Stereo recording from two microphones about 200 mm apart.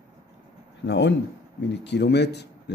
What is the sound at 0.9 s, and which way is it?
Speech, 65° left (ahead or behind).